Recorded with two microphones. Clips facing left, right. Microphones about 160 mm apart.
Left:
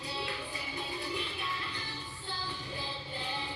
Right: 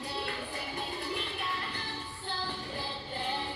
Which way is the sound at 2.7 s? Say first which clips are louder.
Right 3 dB; 55° right (ahead or behind).